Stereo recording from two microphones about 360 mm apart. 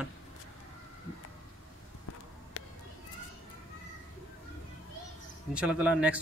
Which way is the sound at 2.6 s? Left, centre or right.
Left.